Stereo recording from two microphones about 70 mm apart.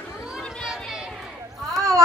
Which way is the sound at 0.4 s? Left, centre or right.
Centre.